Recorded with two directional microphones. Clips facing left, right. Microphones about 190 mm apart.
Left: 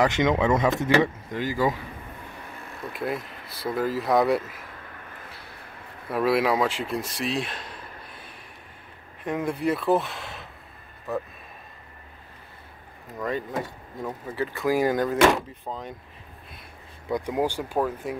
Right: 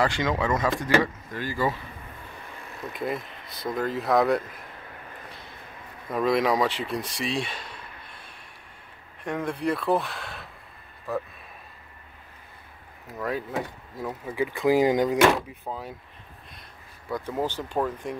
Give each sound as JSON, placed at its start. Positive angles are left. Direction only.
{"t": 0.0, "sound": "speech", "side_deg": 20}
{"t": 2.9, "sound": "speech", "side_deg": 5}
{"t": 6.0, "sound": "speech", "side_deg": 5}
{"t": 13.2, "sound": "speech", "side_deg": -5}
{"t": 15.3, "sound": "speech", "side_deg": -5}
{"t": 17.1, "sound": "speech", "side_deg": 15}